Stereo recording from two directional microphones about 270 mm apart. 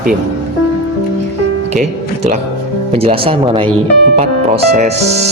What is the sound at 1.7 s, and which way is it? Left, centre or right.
A man's voice, right.